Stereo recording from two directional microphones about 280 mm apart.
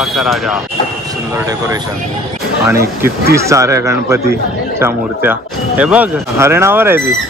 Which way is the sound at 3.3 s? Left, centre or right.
Centre.